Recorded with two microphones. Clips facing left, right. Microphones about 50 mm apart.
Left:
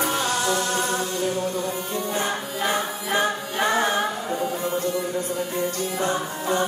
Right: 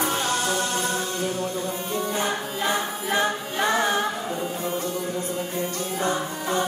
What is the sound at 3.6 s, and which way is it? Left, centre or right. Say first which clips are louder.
Music: left 1 dB; centre.